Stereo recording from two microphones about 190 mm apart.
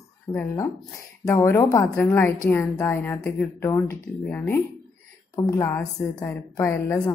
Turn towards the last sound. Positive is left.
turn(degrees=15)  # may be behind; listen again after turning